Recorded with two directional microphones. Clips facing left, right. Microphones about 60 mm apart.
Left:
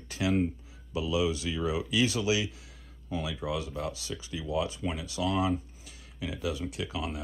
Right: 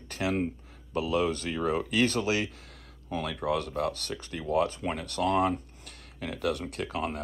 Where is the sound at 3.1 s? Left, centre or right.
Right.